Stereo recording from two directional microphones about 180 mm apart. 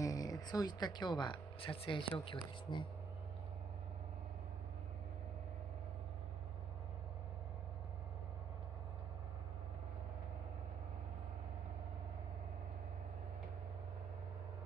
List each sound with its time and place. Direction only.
0.0 s speech: 20° left (ahead or behind)